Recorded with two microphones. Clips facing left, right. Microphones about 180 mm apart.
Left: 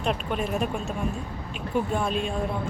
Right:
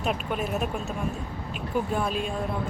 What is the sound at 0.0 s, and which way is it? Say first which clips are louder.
Speech: left 1 dB; 5° right (ahead or behind).